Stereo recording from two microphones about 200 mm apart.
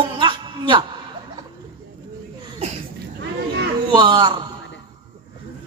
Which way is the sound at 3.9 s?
25° right (ahead or behind).